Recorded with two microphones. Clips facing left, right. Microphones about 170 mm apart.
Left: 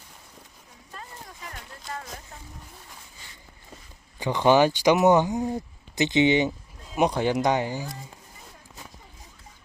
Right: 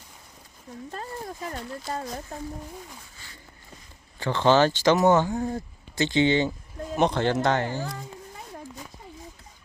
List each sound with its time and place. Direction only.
1.9 s speech: 30° right (ahead or behind)
4.2 s speech: 15° left (ahead or behind)